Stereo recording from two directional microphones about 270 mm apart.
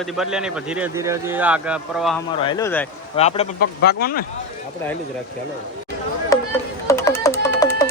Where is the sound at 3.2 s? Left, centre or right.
Left.